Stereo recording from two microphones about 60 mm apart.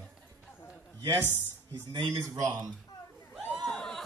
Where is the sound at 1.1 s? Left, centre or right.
Left.